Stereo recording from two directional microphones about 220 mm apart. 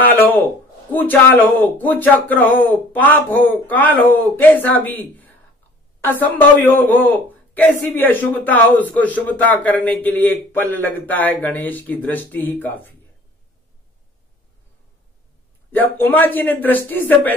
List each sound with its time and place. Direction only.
0.0 s a man's voice: 10° left (ahead or behind)
15.7 s a man's voice: 10° left (ahead or behind)